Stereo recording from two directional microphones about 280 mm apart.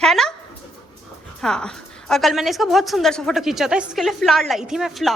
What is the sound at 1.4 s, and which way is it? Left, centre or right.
A woman's voice, centre.